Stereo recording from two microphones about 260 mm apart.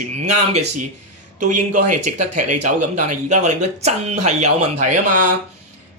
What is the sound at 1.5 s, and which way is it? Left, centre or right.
Speech, right.